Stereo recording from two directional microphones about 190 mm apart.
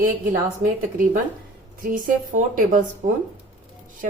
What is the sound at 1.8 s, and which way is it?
A woman's voice, 45° right (ahead or behind).